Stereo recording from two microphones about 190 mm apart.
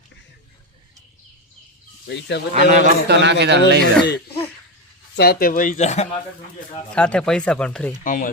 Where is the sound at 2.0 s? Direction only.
65° left (ahead or behind).